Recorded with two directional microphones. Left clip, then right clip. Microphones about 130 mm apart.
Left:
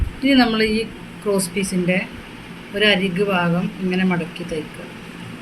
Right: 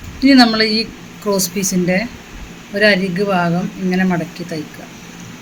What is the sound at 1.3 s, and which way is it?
Speech, 70° right (ahead or behind).